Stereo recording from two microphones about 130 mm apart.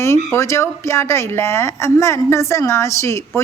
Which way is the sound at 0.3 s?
20° left (ahead or behind).